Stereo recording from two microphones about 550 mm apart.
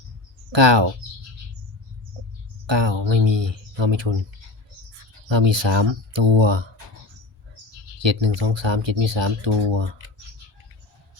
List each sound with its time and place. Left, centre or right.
0.5 s speech: right
2.6 s speech: right
5.3 s speech: right
8.0 s speech: right